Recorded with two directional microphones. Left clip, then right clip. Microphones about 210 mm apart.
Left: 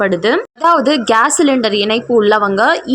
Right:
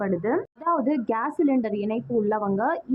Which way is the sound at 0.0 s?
25° left (ahead or behind).